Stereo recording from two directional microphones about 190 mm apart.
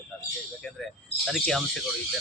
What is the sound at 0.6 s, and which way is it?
Speech, 5° left (ahead or behind).